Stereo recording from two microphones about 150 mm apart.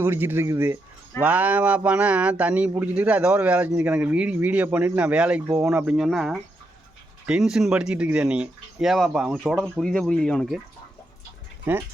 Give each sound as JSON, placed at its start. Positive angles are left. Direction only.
{"t": 0.0, "sound": "speech", "side_deg": -15}
{"t": 11.6, "sound": "speech", "side_deg": -15}